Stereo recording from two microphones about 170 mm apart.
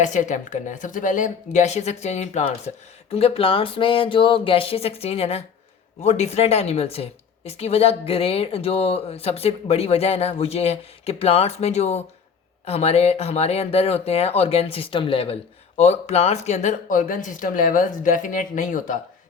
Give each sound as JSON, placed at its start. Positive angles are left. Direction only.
{"t": 0.0, "sound": "speech", "side_deg": 45}